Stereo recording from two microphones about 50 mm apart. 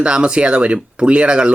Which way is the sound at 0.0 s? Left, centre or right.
Centre.